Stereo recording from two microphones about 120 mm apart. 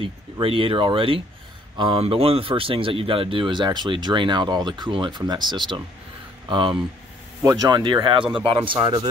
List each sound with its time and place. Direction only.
0.0 s speech: 50° right (ahead or behind)